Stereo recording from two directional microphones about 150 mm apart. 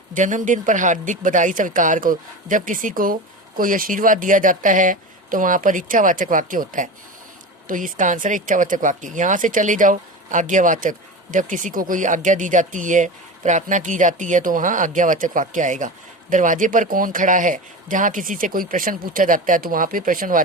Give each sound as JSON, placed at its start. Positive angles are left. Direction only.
{"t": 0.1, "sound": "speech", "side_deg": -55}